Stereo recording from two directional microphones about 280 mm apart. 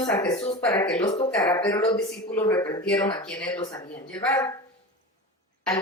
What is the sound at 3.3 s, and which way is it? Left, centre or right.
A woman's voice, centre.